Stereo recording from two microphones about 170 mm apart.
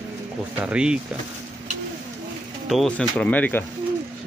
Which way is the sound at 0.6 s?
5° right (ahead or behind).